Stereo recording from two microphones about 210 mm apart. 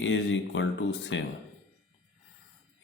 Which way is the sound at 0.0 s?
60° left (ahead or behind).